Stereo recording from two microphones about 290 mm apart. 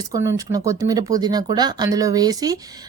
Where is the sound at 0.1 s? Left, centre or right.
Centre.